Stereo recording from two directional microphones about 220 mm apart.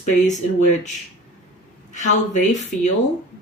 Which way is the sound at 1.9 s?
35° left (ahead or behind).